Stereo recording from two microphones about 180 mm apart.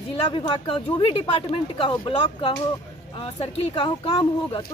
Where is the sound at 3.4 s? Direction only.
30° left (ahead or behind).